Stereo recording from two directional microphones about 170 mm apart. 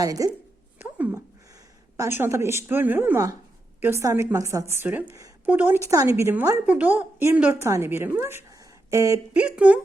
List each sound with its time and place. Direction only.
0.0 s speech: 20° right (ahead or behind)
0.8 s a sound: 10° right (ahead or behind)
2.0 s a woman's voice: 15° right (ahead or behind)
9.3 s a woman's voice: 5° right (ahead or behind)